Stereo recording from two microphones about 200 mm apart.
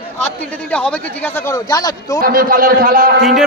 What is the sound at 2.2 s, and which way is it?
A man's voice, 45° right (ahead or behind).